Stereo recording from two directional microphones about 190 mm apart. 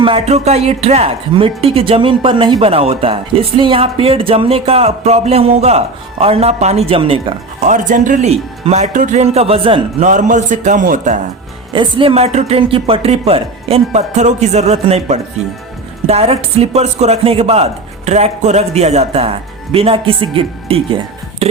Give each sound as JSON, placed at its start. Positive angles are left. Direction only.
{"t": 0.0, "sound": "speech", "side_deg": -30}
{"t": 10.1, "sound": "speech", "side_deg": -40}
{"t": 11.7, "sound": "speech", "side_deg": -25}